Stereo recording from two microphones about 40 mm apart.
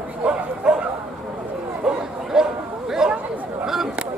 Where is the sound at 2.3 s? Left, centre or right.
Centre.